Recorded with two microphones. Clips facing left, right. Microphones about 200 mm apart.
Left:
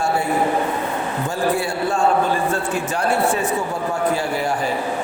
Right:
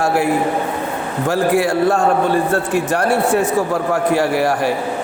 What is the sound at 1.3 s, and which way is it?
Speech, 90° right.